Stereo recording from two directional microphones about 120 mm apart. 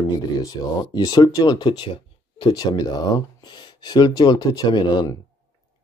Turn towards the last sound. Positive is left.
turn(degrees=35)  # may be behind; listen again after turning